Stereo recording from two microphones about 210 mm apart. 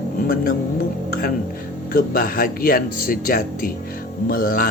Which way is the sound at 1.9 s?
45° left (ahead or behind).